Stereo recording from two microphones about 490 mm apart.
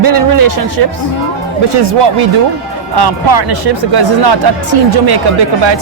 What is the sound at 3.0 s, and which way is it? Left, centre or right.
Speech, right.